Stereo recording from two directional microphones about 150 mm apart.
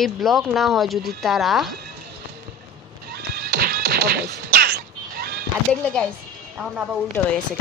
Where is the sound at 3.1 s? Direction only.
90° right.